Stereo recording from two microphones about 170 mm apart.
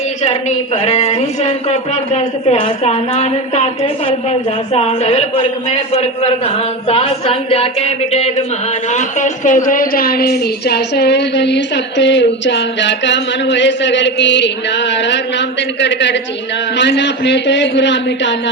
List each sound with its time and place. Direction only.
0.2 s a woman's voice: 40° left (ahead or behind); by 18.5 s 90° left